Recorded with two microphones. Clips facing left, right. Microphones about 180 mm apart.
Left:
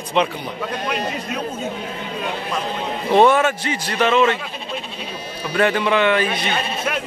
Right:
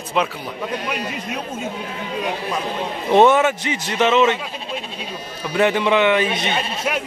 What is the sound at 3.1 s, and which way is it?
A man's voice, 20° right (ahead or behind).